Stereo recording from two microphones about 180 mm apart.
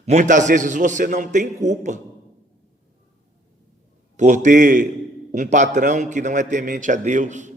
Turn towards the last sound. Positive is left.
turn(degrees=-40)  # may be behind; listen again after turning